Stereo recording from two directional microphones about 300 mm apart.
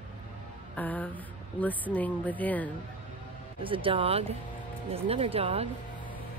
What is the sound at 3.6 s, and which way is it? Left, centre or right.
Speech, centre.